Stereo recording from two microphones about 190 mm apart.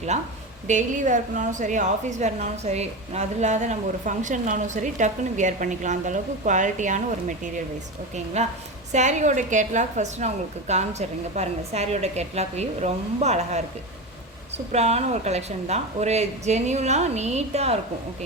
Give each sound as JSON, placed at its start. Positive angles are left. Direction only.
{"t": 0.7, "sound": "a woman's voice", "side_deg": -40}
{"t": 14.7, "sound": "a woman's voice", "side_deg": -35}